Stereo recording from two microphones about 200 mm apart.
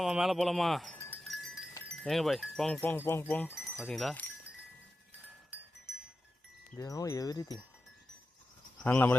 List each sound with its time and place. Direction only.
0.0 s speech: centre (ahead or behind)
0.9 s wind chime: 5° left (ahead or behind)
1.9 s speech: centre (ahead or behind)
6.7 s speech: 15° left (ahead or behind)
8.8 s speech: 10° left (ahead or behind)